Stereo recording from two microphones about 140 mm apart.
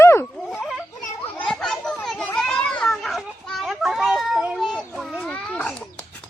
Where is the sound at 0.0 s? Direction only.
15° left (ahead or behind).